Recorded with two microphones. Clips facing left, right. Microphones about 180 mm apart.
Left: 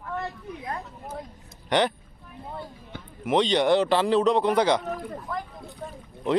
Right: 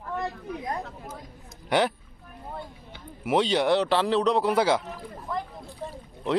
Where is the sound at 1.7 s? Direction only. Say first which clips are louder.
Left 1 dB; 5° right (ahead or behind).